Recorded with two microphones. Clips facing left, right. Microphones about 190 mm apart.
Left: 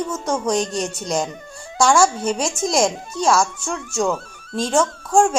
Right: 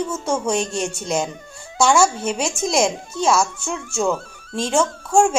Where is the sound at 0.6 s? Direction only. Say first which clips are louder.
Even; 25° right (ahead or behind).